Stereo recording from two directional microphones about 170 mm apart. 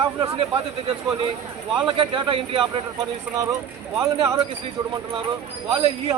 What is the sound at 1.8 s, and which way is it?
Speech, 30° right (ahead or behind).